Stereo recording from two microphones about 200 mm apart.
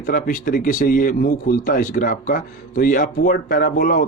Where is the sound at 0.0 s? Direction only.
40° left (ahead or behind).